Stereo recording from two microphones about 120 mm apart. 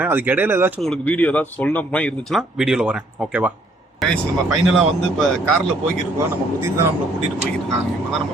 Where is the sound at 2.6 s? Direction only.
5° right (ahead or behind).